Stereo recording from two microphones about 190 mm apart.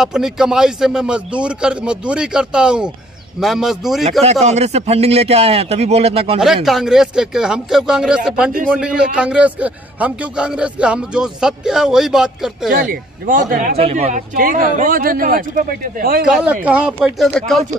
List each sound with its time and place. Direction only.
0.0 s a man's voice: 5° right (ahead or behind)
4.2 s a man's voice: 35° right (ahead or behind)
6.4 s a man's voice: centre (ahead or behind)
12.8 s a man's voice: 50° right (ahead or behind)
16.3 s a man's voice: 5° right (ahead or behind)